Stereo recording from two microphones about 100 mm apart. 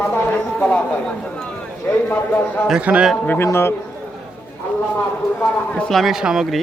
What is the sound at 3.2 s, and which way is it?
Speech, 15° left (ahead or behind).